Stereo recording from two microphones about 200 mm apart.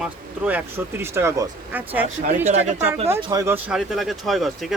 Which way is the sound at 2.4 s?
30° right (ahead or behind).